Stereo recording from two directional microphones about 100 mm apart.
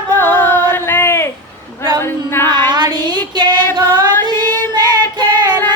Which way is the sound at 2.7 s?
45° right (ahead or behind).